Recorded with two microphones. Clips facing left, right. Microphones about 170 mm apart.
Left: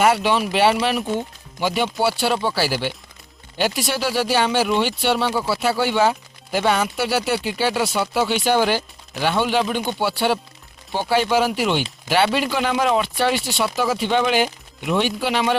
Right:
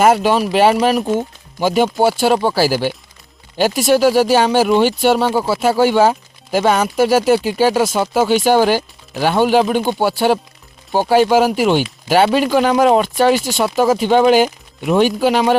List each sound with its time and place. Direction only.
0.0 s speech: 45° right (ahead or behind)